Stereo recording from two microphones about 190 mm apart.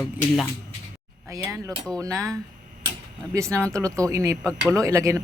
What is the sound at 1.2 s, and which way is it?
Speech, 15° right (ahead or behind).